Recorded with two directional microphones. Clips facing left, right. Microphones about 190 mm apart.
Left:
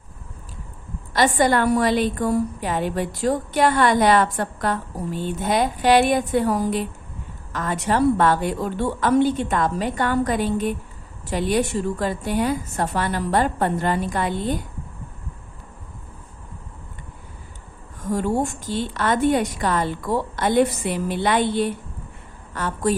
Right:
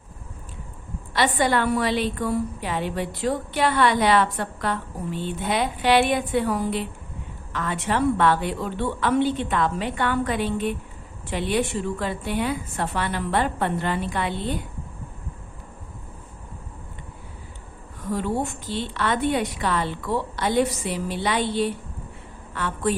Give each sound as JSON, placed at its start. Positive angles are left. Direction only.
{"t": 1.1, "sound": "a woman's voice", "side_deg": 45}
{"t": 18.0, "sound": "a woman's voice", "side_deg": 45}
{"t": 22.5, "sound": "a woman's voice", "side_deg": 40}